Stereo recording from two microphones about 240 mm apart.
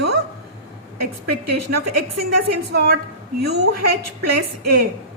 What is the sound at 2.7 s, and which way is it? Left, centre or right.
Speech, right.